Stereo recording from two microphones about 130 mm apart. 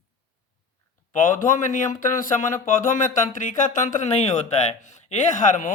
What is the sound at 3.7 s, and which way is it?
A man's voice, 70° left (ahead or behind).